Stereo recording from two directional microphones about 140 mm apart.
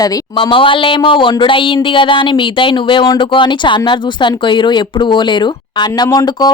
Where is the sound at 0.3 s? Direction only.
35° left (ahead or behind).